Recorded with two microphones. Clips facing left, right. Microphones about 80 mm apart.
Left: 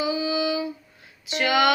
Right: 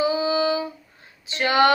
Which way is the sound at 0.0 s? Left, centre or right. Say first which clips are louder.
Right 3 dB; right.